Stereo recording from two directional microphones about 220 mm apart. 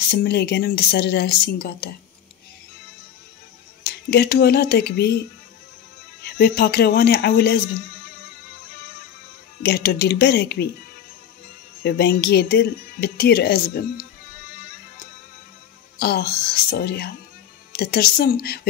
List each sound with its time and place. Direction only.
0.1 s speech: 45° left (ahead or behind)
3.8 s speech: 45° left (ahead or behind)
6.2 s speech: 45° left (ahead or behind)
9.6 s speech: 45° left (ahead or behind)
11.8 s speech: 45° left (ahead or behind)
16.0 s speech: 45° left (ahead or behind)